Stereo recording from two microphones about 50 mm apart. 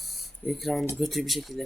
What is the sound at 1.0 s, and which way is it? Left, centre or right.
Speech, centre.